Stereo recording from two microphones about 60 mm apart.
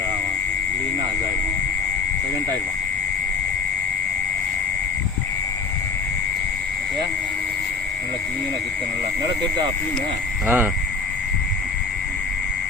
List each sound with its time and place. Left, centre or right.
10.4 s speech: right